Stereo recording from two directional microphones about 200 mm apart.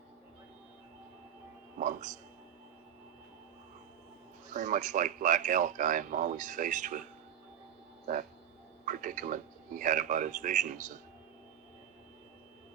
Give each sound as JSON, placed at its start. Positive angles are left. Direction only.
{"t": 1.8, "sound": "music", "side_deg": -40}
{"t": 4.5, "sound": "speech", "side_deg": -40}
{"t": 8.9, "sound": "speech", "side_deg": -40}